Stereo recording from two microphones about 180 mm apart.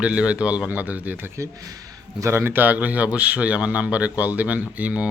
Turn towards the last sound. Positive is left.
turn(degrees=-5)  # may be behind; listen again after turning